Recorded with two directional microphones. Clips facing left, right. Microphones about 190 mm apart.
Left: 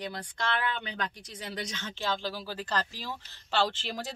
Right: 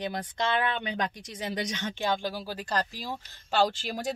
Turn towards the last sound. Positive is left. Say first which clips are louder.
# right 4 dB
turn(degrees=-45)  # may be behind; listen again after turning